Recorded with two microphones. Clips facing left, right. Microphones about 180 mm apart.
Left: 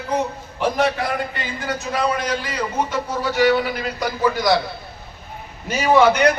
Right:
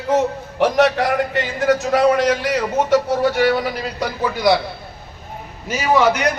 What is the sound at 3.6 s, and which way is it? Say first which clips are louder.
Speech: right 1 dB; 40° right (ahead or behind).